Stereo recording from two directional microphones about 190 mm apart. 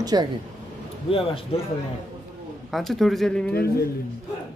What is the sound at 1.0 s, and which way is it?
Speech, 30° left (ahead or behind).